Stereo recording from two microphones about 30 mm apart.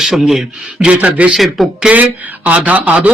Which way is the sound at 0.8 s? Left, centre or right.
Right.